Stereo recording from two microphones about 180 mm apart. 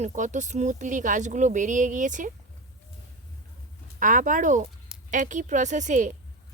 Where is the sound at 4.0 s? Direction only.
45° right (ahead or behind).